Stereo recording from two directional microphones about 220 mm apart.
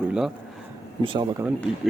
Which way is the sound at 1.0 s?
20° right (ahead or behind).